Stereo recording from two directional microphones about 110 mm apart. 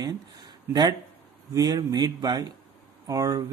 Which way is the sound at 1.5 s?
30° right (ahead or behind).